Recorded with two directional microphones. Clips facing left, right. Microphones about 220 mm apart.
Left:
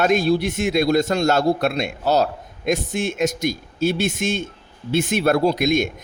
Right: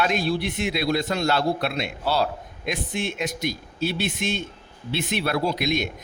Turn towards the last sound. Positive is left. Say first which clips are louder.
# left 6 dB
turn(degrees=45)  # may be behind; listen again after turning